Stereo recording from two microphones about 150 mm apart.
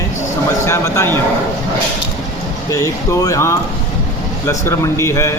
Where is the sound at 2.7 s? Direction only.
20° left (ahead or behind).